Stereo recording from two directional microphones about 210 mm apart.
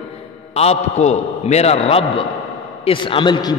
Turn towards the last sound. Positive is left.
turn(degrees=20)  # may be behind; listen again after turning